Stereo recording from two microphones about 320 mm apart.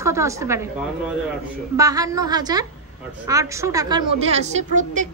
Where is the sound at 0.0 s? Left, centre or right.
Centre.